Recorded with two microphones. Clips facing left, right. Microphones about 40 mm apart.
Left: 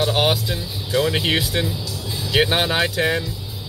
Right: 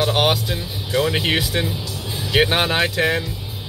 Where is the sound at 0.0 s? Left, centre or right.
Centre.